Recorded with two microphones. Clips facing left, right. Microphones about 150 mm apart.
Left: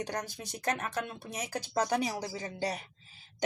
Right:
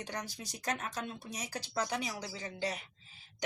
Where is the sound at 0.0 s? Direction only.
45° left (ahead or behind).